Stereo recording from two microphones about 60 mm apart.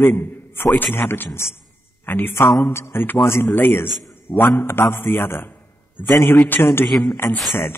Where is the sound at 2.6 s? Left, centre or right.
Left.